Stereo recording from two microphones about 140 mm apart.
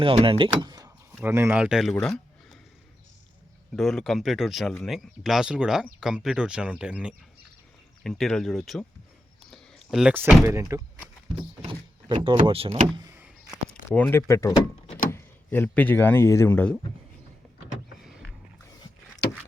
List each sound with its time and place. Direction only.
0.0 s speech: 40° right (ahead or behind)
1.2 s speech: 15° right (ahead or behind)
1.5 s speech: 5° right (ahead or behind)
3.8 s speech: centre (ahead or behind)
8.0 s speech: 5° left (ahead or behind)
9.5 s a sound: centre (ahead or behind)
10.4 s speech: 20° right (ahead or behind)
12.1 s speech: 40° right (ahead or behind)
13.1 s a sound: 10° right (ahead or behind)
13.9 s speech: 10° left (ahead or behind)
14.2 s speech: 20° left (ahead or behind)